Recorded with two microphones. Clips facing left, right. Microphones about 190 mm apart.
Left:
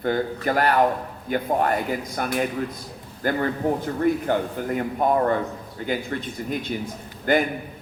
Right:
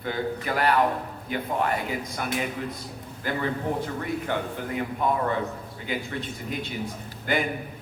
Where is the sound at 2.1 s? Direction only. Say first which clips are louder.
Left 6 dB; 50° left (ahead or behind).